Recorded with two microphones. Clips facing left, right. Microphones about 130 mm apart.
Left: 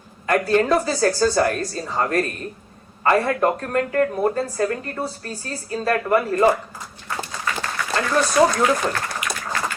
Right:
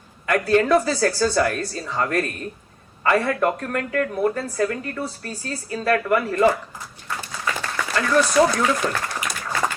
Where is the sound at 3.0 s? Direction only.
40° left (ahead or behind).